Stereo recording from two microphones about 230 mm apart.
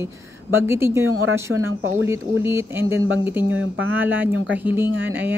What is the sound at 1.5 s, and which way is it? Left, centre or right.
Speech, right.